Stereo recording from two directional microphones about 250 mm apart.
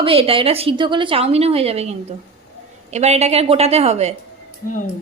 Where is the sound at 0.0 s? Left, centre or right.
Right.